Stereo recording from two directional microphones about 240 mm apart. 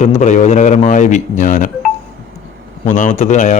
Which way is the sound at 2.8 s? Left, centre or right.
Left.